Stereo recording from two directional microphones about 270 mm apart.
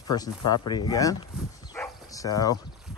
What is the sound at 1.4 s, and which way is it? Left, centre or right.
Bow-wow, centre.